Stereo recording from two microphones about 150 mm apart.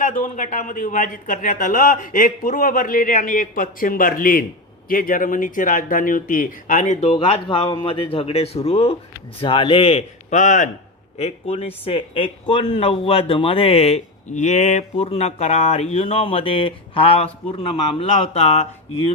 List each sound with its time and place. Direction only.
0.0 s a man's voice: 60° left (ahead or behind)
7.1 s speech: 40° left (ahead or behind); by 10.7 s 55° left (ahead or behind)
11.2 s speech: 45° left (ahead or behind)